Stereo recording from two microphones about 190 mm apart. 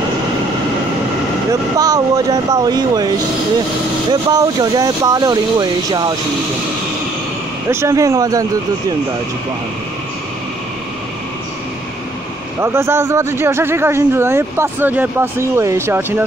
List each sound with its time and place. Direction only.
1.5 s speech: 20° right (ahead or behind)
4.1 s speech: 20° right (ahead or behind)
7.7 s speech: 15° right (ahead or behind)
12.5 s speech: 15° right (ahead or behind)